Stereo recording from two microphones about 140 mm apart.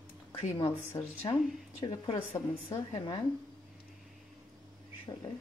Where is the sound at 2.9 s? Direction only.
35° left (ahead or behind).